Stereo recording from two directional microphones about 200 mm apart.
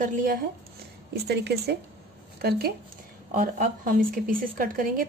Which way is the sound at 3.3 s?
40° right (ahead or behind).